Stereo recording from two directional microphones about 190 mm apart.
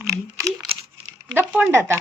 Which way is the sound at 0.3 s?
15° right (ahead or behind).